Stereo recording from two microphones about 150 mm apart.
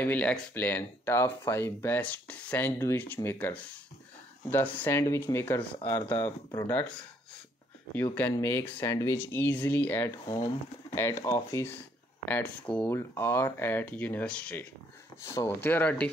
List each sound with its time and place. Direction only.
0.0 s speech: 10° left (ahead or behind)
7.9 s speech: 10° left (ahead or behind)
10.2 s speech: 25° left (ahead or behind)